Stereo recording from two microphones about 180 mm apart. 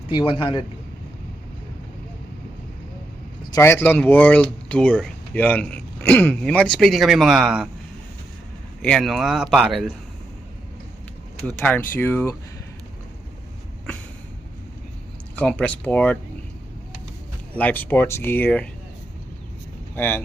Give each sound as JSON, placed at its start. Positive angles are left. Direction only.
{"t": 0.1, "sound": "a man's voice", "side_deg": 25}
{"t": 3.5, "sound": "speech", "side_deg": 15}
{"t": 8.8, "sound": "a man's voice", "side_deg": 5}
{"t": 11.4, "sound": "speech", "side_deg": 5}
{"t": 15.4, "sound": "speech", "side_deg": 5}
{"t": 17.6, "sound": "speech", "side_deg": 10}
{"t": 20.0, "sound": "speech", "side_deg": 10}